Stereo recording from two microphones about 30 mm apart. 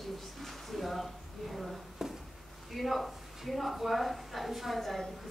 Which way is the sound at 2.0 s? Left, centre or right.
Centre.